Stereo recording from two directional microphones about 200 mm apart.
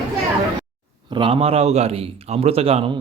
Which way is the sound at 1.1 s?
25° right (ahead or behind).